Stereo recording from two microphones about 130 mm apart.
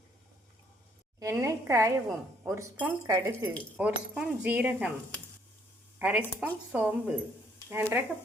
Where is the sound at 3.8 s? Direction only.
10° right (ahead or behind).